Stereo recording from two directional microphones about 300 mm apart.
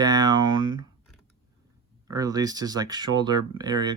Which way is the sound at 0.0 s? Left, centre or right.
Centre.